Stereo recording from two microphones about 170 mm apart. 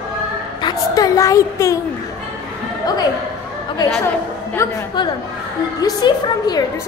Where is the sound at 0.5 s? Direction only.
25° left (ahead or behind).